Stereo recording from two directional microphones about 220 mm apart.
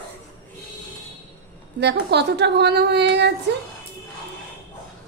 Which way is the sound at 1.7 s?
50° right (ahead or behind).